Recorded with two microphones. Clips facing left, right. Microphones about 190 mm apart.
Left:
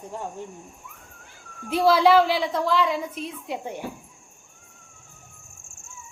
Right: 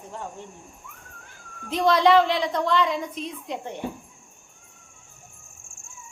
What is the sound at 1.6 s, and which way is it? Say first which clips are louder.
Speech: left 1 dB; 5° left (ahead or behind).